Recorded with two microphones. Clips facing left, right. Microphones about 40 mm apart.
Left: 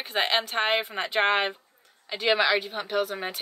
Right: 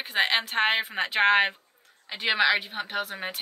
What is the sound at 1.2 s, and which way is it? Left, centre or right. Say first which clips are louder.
Speech: right 3 dB; right.